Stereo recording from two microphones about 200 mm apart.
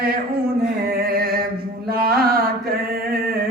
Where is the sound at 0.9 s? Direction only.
50° right (ahead or behind).